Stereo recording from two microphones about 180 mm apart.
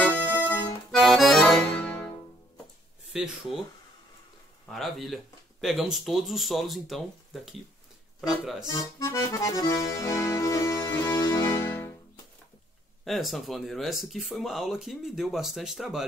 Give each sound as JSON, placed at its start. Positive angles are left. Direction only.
{"t": 0.0, "sound": "accordion", "side_deg": 10}
{"t": 0.9, "sound": "accordion", "side_deg": 0}
{"t": 3.1, "sound": "speech", "side_deg": -5}
{"t": 4.6, "sound": "speech", "side_deg": 0}
{"t": 8.2, "sound": "speech", "side_deg": 0}
{"t": 8.7, "sound": "accordion", "side_deg": 15}
{"t": 13.0, "sound": "speech", "side_deg": 0}